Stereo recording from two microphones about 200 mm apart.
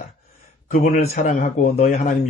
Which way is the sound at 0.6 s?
40° left (ahead or behind).